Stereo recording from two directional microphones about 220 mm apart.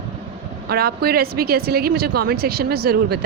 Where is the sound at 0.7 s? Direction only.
45° right (ahead or behind).